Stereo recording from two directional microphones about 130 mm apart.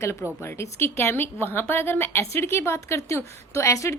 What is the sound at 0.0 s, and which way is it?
A woman's voice, 20° left (ahead or behind).